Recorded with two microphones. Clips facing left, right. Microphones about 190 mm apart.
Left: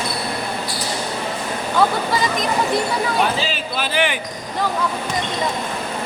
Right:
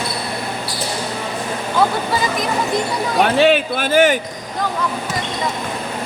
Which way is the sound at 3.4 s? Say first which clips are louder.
Right 10 dB; 60° right (ahead or behind).